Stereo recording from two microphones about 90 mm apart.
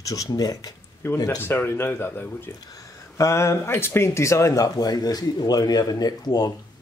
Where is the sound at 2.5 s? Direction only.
40° left (ahead or behind).